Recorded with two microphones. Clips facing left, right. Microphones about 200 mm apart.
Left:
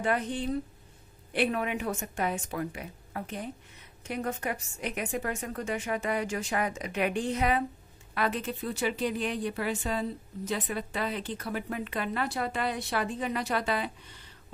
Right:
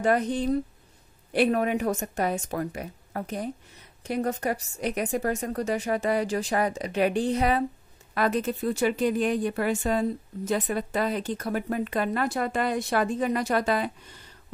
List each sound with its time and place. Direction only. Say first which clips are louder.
0.0 s a woman's voice: right 6 dB; 40° right (ahead or behind)